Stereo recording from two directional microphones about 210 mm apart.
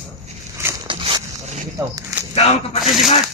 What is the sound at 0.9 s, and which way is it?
Zipper, 25° right (ahead or behind).